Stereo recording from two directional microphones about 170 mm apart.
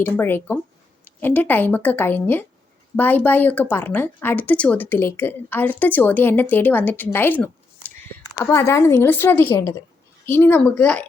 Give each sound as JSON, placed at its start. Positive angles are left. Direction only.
{"t": 0.0, "sound": "a woman's voice", "side_deg": 10}